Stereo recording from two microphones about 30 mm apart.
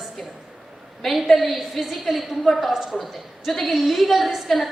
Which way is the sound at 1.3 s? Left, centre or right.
Centre.